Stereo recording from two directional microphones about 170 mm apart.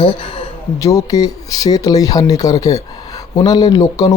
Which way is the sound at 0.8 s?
20° left (ahead or behind).